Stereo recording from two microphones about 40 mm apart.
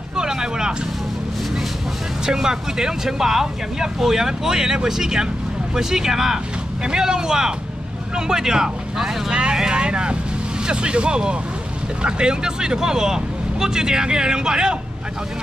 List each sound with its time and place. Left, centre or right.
0.1 s vehicle: centre
2.2 s speech: centre
9.3 s speech: right